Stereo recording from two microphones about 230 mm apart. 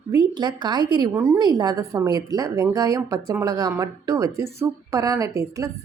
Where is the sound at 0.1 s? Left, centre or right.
Centre.